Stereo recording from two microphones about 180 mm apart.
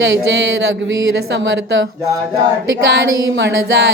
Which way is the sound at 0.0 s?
80° right.